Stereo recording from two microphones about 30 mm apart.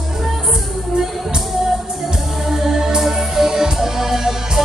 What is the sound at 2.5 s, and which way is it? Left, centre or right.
Music, centre.